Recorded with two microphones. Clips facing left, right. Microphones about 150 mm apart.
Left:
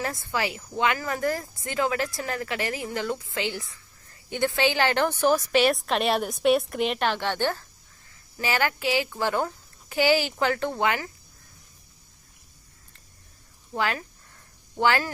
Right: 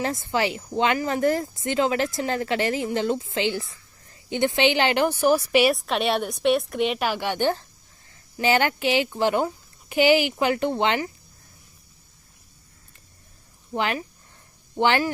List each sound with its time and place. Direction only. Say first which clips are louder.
0.0 s speech: right 4 dB; 25° right (ahead or behind)
5.7 s a woman's voice: right 1 dB; centre (ahead or behind); by 11.1 s 25° right (ahead or behind)
13.7 s speech: right 2 dB; 20° right (ahead or behind)